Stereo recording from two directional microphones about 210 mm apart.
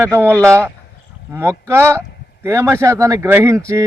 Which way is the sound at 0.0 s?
10° right (ahead or behind).